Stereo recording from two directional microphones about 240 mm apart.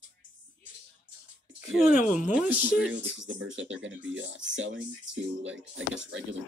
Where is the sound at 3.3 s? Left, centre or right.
Right.